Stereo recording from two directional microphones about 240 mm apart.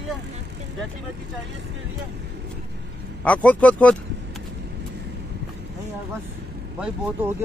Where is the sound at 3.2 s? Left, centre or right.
Centre.